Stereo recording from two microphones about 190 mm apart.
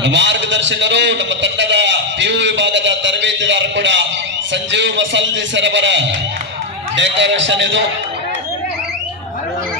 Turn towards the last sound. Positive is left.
turn(degrees=-70)  # may be behind; listen again after turning